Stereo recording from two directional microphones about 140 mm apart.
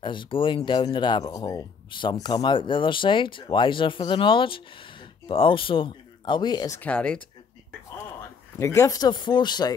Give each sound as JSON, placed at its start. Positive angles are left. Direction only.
{"t": 0.0, "sound": "speech", "side_deg": 35}
{"t": 6.8, "sound": "speech", "side_deg": 10}
{"t": 8.5, "sound": "speech", "side_deg": 20}